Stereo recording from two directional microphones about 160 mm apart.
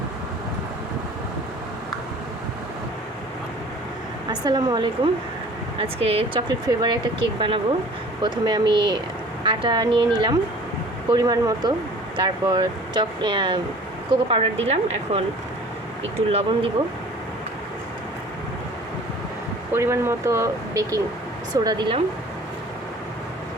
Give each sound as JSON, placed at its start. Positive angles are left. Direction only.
{"t": 4.3, "sound": "speech", "side_deg": -25}
{"t": 5.8, "sound": "speech", "side_deg": -40}
{"t": 19.7, "sound": "speech", "side_deg": -15}